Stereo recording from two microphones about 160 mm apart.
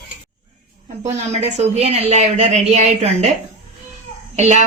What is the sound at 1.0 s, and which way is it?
A woman's voice, 45° right (ahead or behind).